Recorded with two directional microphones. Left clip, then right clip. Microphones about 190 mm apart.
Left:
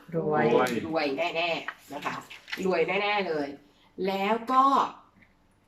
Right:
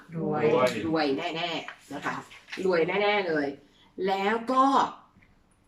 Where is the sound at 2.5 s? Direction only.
50° left (ahead or behind).